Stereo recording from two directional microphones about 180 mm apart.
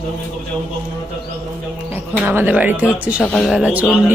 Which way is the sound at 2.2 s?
10° right (ahead or behind).